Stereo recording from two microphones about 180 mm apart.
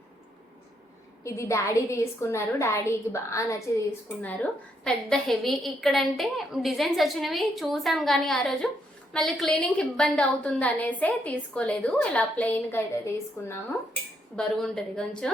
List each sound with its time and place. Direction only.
1.2 s a woman's voice: 15° left (ahead or behind)
14.3 s a woman's voice: 5° left (ahead or behind)